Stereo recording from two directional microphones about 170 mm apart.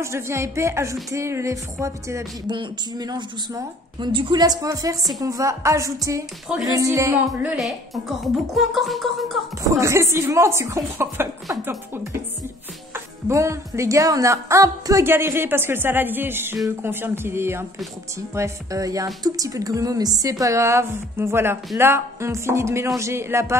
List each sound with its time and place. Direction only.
0.0 s a woman's voice: 15° right (ahead or behind)
7.5 s music: centre (ahead or behind)
9.7 s a woman's voice: 15° right (ahead or behind)